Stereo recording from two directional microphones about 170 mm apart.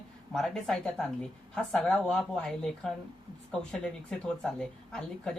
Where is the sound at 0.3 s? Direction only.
5° left (ahead or behind).